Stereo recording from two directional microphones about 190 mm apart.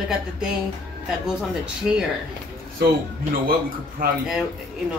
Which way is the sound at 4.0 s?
50° right (ahead or behind).